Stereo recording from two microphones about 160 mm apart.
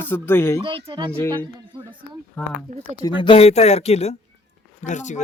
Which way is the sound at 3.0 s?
30° left (ahead or behind).